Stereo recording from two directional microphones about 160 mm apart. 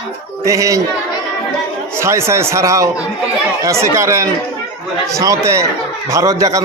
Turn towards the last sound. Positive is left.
turn(degrees=-20)  # may be behind; listen again after turning